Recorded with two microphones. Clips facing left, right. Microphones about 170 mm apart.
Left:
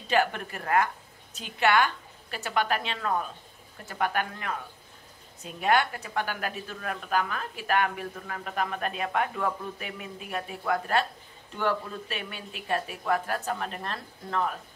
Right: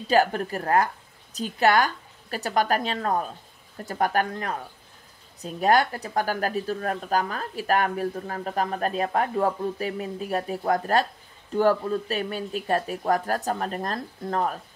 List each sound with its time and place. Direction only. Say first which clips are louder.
0.1 s speech: right 5 dB; 35° right (ahead or behind)